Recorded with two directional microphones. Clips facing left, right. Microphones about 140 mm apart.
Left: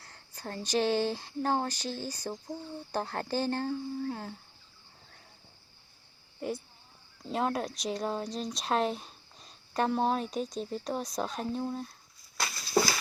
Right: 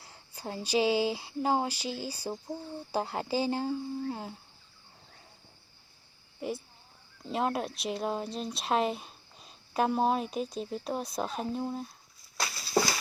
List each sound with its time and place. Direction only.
0.0 s speech: 10° right (ahead or behind)
6.4 s speech: 5° right (ahead or behind)